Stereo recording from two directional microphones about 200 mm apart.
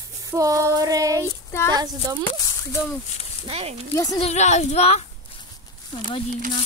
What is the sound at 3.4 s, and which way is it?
Speech, 30° right (ahead or behind).